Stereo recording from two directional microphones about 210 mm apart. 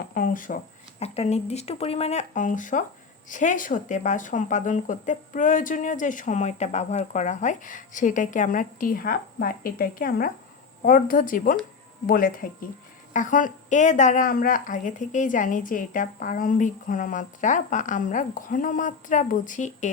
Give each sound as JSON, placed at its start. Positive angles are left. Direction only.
{"t": 0.0, "sound": "speech", "side_deg": 40}